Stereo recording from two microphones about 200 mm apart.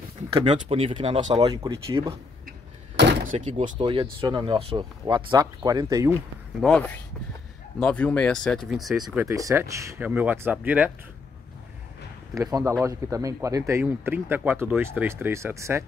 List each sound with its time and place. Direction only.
0.3 s speech: 25° right (ahead or behind)
1.5 s speech: 15° right (ahead or behind)
3.0 s door: 55° right (ahead or behind)
3.3 s speech: 35° right (ahead or behind)
3.7 s speech: 25° right (ahead or behind)
6.6 s speech: 5° left (ahead or behind)
9.1 s speech: 15° right (ahead or behind)
12.4 s speech: 15° right (ahead or behind)